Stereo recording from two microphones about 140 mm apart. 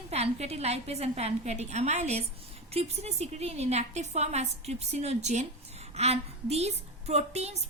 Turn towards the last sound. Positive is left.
turn(degrees=-50)  # may be behind; listen again after turning